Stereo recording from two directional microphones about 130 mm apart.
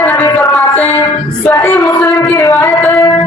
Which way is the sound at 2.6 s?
20° left (ahead or behind).